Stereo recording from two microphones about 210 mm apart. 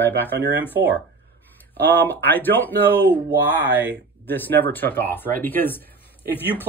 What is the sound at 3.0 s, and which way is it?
Speech, 10° right (ahead or behind).